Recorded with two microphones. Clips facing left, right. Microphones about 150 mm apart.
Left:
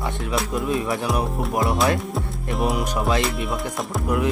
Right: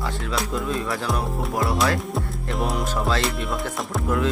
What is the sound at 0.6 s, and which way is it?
Music, 20° left (ahead or behind).